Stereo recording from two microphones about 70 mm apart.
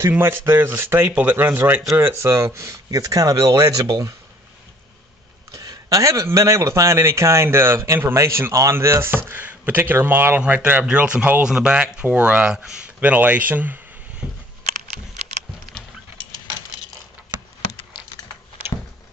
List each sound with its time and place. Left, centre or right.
0.2 s a man's voice: right
5.5 s a man's voice: right
10.4 s speech: centre
11.4 s speech: centre